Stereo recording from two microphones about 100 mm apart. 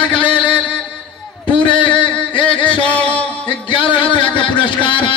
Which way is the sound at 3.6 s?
55° left (ahead or behind).